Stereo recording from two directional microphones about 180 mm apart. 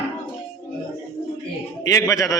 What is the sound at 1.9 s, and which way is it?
Speech, 15° left (ahead or behind).